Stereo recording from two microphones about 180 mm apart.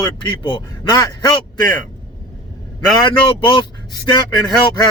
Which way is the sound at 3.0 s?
25° left (ahead or behind).